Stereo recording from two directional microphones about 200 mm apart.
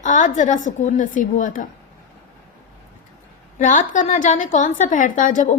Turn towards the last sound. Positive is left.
turn(degrees=40)  # may be behind; listen again after turning